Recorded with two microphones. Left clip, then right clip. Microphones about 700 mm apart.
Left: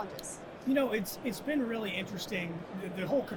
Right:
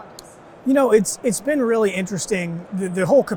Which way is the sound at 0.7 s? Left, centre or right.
Right.